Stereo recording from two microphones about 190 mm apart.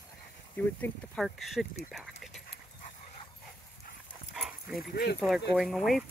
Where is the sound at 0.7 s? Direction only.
Centre (ahead or behind).